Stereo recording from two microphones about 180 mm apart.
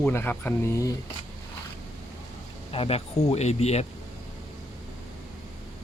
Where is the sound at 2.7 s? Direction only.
30° left (ahead or behind).